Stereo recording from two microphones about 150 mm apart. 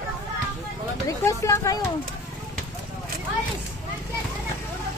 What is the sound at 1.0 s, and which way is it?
Speech, 20° left (ahead or behind).